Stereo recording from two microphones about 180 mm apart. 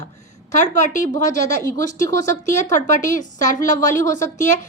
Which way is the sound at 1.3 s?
65° right (ahead or behind).